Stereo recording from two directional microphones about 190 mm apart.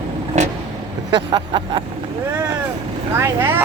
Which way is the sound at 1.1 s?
25° right (ahead or behind).